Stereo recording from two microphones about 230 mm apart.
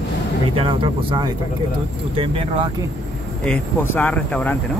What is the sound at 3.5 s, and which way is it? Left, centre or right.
Speech, centre.